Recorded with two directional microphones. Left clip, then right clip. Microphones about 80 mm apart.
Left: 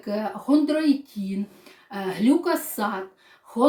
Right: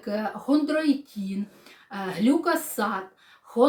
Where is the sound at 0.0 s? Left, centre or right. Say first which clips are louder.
Left 1 dB; right.